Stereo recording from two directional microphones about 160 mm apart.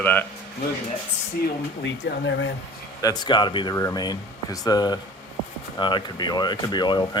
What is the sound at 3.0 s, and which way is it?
Speech, 25° left (ahead or behind).